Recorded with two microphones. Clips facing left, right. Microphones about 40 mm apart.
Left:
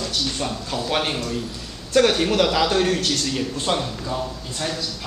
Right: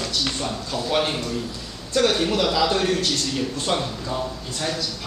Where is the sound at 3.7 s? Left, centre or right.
Centre.